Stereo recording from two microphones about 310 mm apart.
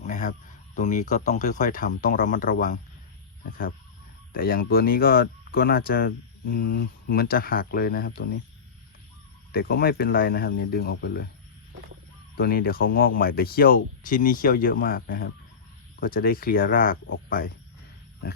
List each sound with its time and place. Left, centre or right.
0.0 s a sound: left
0.8 s speech: left
4.3 s speech: left
9.5 s speech: left
12.4 s speech: left